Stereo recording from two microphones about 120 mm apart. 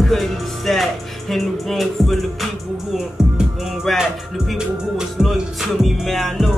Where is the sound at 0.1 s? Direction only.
Centre (ahead or behind).